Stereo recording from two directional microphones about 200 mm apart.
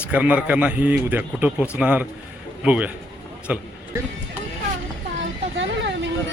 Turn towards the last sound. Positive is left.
turn(degrees=-65)  # may be behind; listen again after turning